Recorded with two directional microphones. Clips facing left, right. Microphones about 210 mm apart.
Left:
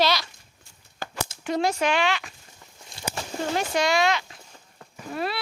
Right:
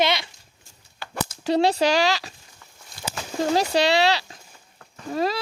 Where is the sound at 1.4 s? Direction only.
35° right (ahead or behind).